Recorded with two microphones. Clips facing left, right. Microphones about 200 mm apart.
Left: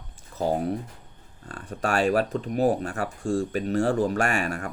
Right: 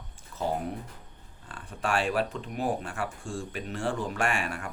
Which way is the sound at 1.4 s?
40° left (ahead or behind).